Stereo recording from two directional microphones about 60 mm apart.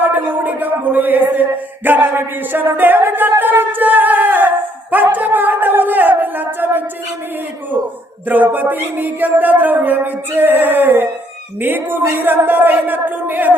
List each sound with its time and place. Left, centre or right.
0.0 s a man's voice: right
8.5 s a man's voice: right